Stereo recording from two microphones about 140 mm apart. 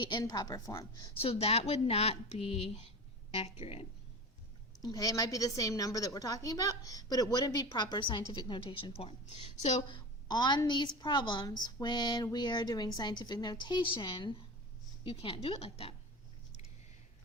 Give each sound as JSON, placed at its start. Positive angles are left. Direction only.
{"t": 0.0, "sound": "a woman's voice", "side_deg": 30}
{"t": 1.1, "sound": "a woman's voice", "side_deg": 45}
{"t": 4.8, "sound": "a woman's voice", "side_deg": 25}
{"t": 9.9, "sound": "a woman's voice", "side_deg": 30}